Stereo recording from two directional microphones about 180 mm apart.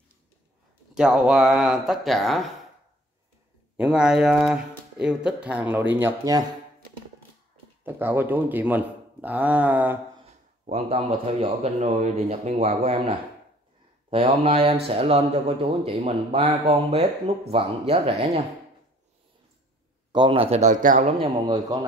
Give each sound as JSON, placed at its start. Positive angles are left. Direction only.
{"t": 0.9, "sound": "speech", "side_deg": -5}
{"t": 3.7, "sound": "speech", "side_deg": -5}
{"t": 7.8, "sound": "speech", "side_deg": -10}
{"t": 10.7, "sound": "speech", "side_deg": -35}
{"t": 20.1, "sound": "speech", "side_deg": -30}
{"t": 21.2, "sound": "speech", "side_deg": -20}